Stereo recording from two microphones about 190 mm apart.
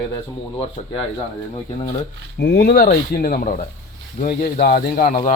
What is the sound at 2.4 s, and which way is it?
Speech, 60° left (ahead or behind).